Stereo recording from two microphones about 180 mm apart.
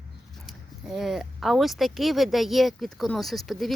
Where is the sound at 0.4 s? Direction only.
Centre (ahead or behind).